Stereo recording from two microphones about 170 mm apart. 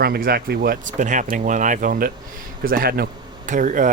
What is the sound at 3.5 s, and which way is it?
Speech, 50° right (ahead or behind).